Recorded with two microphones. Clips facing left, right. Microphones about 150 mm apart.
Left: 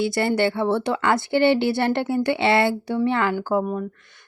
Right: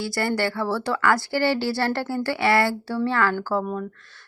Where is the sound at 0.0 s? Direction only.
20° left (ahead or behind).